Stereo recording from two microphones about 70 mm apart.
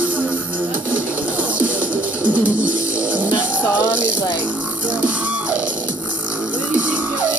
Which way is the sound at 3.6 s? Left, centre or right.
Left.